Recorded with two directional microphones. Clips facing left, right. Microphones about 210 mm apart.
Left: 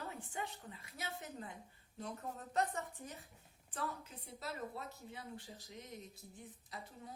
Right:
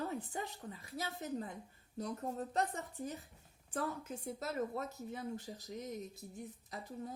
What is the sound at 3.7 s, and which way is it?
Speech, 45° right (ahead or behind).